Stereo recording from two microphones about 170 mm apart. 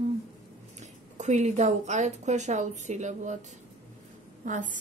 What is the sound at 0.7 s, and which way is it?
Speech, 45° right (ahead or behind).